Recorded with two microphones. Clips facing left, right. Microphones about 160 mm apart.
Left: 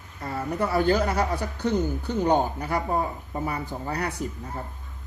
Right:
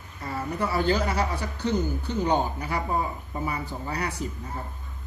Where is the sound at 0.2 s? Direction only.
55° left (ahead or behind).